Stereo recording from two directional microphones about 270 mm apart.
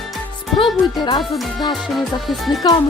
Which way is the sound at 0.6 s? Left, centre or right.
Centre.